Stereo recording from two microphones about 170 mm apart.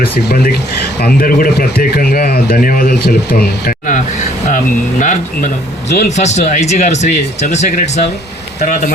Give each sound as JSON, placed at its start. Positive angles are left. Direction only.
{"t": 0.0, "sound": "speech", "side_deg": 65}